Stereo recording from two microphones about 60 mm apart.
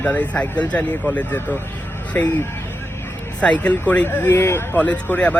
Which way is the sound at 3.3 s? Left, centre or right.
Left.